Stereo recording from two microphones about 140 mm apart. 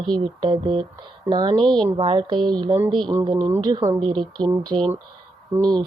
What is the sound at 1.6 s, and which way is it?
Speech, 5° left (ahead or behind).